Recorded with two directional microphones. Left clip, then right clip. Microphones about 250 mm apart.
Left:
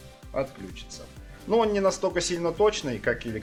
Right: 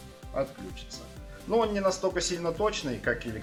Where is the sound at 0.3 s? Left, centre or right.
Left.